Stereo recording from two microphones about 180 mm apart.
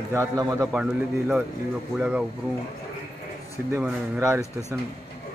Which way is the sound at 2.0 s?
5° right (ahead or behind).